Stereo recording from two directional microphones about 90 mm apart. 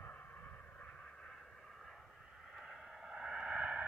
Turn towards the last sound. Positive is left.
turn(degrees=-15)  # may be behind; listen again after turning